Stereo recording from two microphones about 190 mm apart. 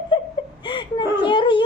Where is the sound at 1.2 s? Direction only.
25° left (ahead or behind).